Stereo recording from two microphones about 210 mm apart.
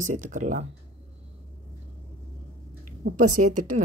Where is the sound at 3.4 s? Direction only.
90° right.